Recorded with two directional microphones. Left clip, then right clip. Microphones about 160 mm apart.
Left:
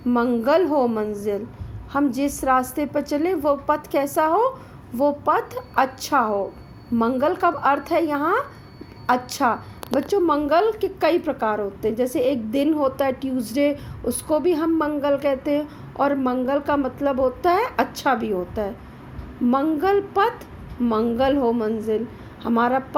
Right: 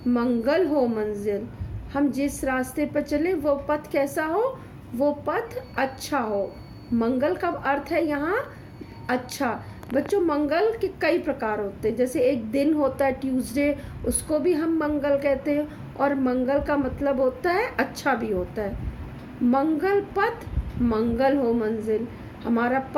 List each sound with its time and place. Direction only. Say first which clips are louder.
0.1 s a woman's voice: left 4 dB; 30° left (ahead or behind)